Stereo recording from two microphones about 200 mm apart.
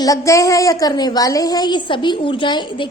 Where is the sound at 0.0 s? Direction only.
15° left (ahead or behind).